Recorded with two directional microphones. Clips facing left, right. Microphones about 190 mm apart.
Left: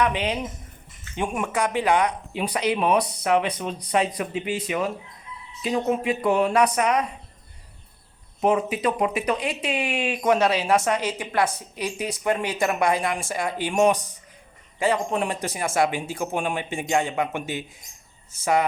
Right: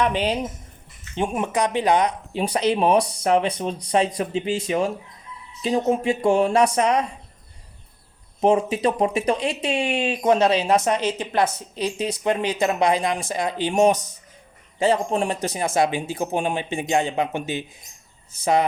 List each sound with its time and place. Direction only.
0.0 s speech: 35° right (ahead or behind)
1.1 s speech: 25° right (ahead or behind)
2.4 s speech: 40° right (ahead or behind)
8.4 s speech: 25° right (ahead or behind)
13.7 s speech: 35° right (ahead or behind)